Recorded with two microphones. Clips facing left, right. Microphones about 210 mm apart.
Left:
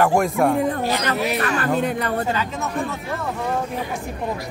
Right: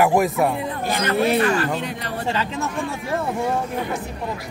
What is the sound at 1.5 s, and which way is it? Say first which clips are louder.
Speech: left 3 dB; 55° left (ahead or behind).